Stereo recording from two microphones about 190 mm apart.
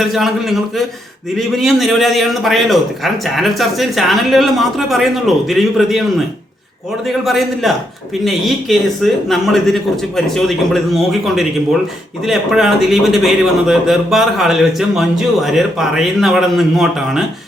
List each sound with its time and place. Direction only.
0.0 s a man's voice: centre (ahead or behind)
7.1 s a man's voice: centre (ahead or behind)